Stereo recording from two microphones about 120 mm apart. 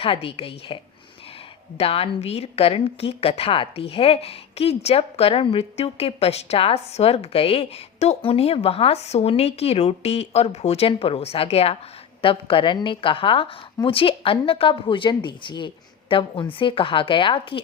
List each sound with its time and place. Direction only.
0.0 s speech: 50° left (ahead or behind)
1.8 s speech: 55° left (ahead or behind)